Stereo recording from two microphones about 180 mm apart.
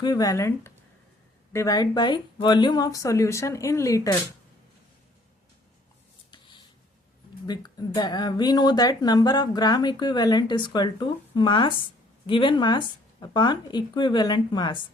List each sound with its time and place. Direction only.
0.0 s speech: 20° left (ahead or behind)
6.3 s a sound: 25° left (ahead or behind)
7.4 s speech: 25° left (ahead or behind)